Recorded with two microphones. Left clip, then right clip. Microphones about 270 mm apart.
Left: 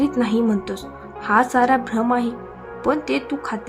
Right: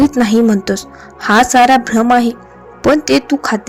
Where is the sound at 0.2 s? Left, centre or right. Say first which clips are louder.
Right 8 dB; right.